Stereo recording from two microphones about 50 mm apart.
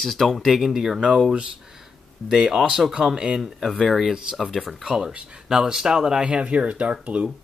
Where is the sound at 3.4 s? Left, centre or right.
Centre; by 7.3 s right.